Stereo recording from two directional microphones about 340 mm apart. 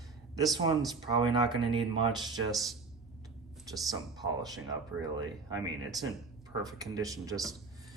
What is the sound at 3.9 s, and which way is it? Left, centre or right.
A man's voice, centre.